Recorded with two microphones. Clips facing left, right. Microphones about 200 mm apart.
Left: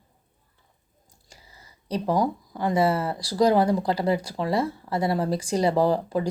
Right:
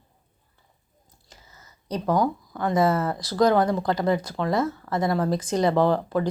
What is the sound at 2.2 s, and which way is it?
Speech, 15° left (ahead or behind).